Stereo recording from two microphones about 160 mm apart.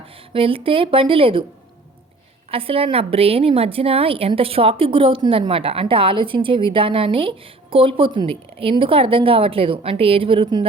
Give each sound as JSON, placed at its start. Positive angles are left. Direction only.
{"t": 0.3, "sound": "a woman's voice", "side_deg": -35}
{"t": 2.5, "sound": "a woman's voice", "side_deg": -35}